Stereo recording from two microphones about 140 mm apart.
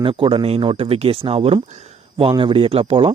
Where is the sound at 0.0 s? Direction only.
40° right (ahead or behind).